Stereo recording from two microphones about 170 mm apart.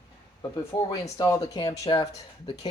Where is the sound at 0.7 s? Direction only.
25° left (ahead or behind).